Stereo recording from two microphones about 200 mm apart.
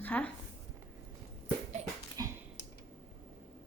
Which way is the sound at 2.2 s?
15° right (ahead or behind).